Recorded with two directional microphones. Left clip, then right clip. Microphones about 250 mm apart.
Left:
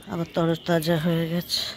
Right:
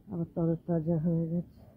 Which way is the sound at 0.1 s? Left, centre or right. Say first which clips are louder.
Left 8 dB; left.